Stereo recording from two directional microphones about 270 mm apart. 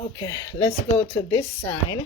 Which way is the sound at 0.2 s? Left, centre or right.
Centre.